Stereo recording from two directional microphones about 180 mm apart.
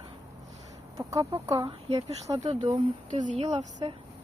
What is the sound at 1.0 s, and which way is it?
Speech, 20° right (ahead or behind).